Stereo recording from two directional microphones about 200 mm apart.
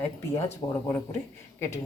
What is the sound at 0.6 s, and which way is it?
Speech, 25° left (ahead or behind).